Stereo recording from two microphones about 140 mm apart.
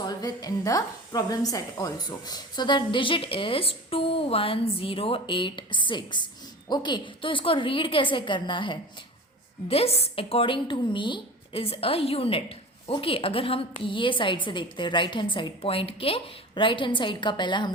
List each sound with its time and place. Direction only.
0.0 s a woman's voice: 30° left (ahead or behind)